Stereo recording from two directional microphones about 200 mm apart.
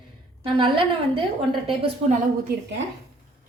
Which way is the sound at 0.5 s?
25° right (ahead or behind).